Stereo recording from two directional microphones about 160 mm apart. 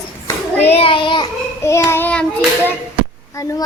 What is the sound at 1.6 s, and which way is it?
Child singing, 15° left (ahead or behind).